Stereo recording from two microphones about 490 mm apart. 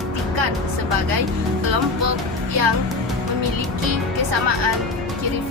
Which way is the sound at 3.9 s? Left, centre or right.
Right.